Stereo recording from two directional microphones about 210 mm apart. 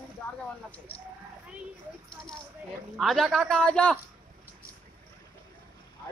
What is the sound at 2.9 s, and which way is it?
A man's voice, centre (ahead or behind).